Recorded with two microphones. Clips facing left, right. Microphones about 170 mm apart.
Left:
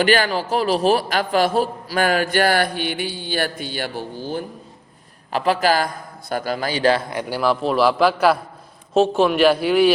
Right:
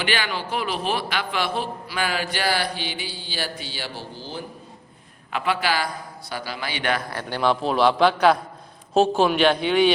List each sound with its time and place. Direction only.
0.0 s a man's voice: 45° left (ahead or behind)
5.3 s a man's voice: 40° left (ahead or behind)
7.1 s a man's voice: 10° left (ahead or behind)